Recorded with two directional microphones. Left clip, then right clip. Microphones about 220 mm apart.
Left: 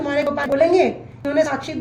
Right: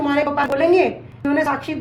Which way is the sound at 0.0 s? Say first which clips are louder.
Right 2 dB; 25° right (ahead or behind).